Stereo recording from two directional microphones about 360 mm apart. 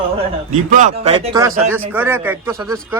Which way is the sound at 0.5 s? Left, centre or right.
Right.